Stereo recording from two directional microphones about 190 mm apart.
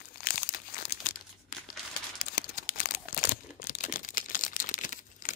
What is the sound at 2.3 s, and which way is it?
Crumpling, 50° left (ahead or behind).